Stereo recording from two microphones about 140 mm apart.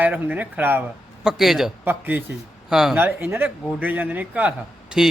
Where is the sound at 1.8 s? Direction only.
15° right (ahead or behind).